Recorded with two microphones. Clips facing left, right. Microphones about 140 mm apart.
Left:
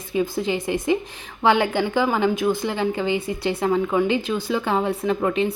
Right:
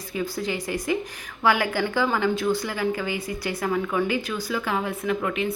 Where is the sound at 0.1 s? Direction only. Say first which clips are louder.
Left 5 dB; 25° left (ahead or behind).